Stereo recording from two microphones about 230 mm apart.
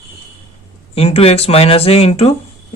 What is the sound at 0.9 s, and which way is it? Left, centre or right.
Speech, left.